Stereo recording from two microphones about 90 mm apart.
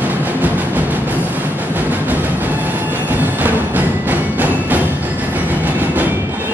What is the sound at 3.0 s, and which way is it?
Music, 20° right (ahead or behind).